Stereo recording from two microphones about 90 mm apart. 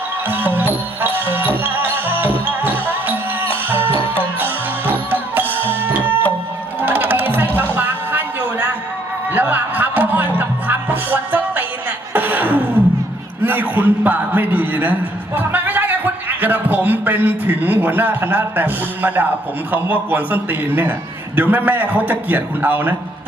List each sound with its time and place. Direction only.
0.3 s music: 20° right (ahead or behind)
12.1 s a sound: 20° right (ahead or behind)
13.4 s a man's voice: 20° right (ahead or behind)